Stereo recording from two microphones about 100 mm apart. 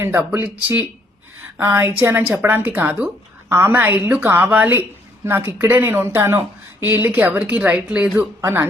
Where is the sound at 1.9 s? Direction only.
20° right (ahead or behind).